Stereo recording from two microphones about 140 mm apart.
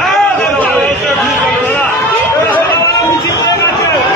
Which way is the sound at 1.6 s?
10° left (ahead or behind).